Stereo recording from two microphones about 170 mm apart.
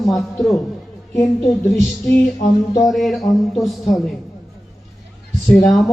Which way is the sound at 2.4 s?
50° left (ahead or behind).